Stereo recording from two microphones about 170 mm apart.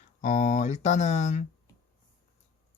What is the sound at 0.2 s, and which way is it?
Speech, 45° left (ahead or behind).